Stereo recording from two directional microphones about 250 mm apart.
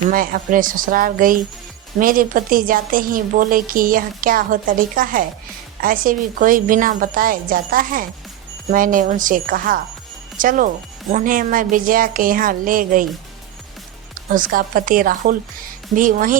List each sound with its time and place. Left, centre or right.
0.1 s a woman's voice: right
14.3 s a woman's voice: right